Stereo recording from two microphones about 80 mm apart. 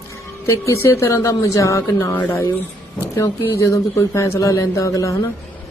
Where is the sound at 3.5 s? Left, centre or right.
Left.